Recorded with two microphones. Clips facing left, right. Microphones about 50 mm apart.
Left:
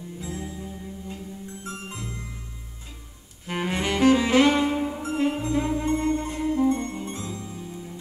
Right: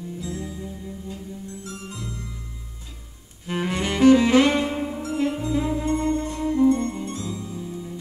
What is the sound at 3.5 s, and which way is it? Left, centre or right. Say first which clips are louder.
Music: right 2 dB; centre.